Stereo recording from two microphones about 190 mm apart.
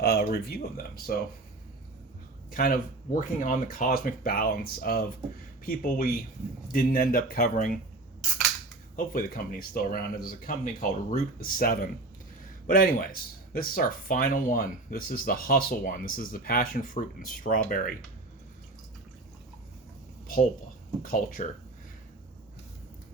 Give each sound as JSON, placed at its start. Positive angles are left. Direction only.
{"t": 0.0, "sound": "speech", "side_deg": 55}
{"t": 2.5, "sound": "speech", "side_deg": 45}
{"t": 9.0, "sound": "speech", "side_deg": 45}
{"t": 20.2, "sound": "speech", "side_deg": 50}